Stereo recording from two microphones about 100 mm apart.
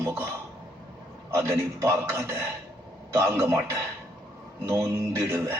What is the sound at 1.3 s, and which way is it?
Speech, 30° right (ahead or behind).